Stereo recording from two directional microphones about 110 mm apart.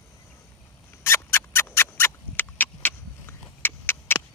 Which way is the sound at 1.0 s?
25° left (ahead or behind).